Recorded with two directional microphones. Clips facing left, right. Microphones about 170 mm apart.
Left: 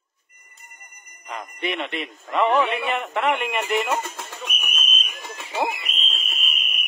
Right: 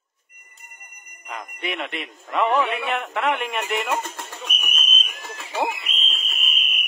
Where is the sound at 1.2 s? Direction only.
Centre (ahead or behind).